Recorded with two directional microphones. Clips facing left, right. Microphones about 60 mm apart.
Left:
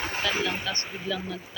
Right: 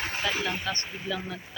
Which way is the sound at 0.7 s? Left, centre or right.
Right.